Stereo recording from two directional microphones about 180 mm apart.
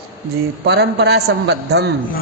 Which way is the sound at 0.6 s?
65° right (ahead or behind).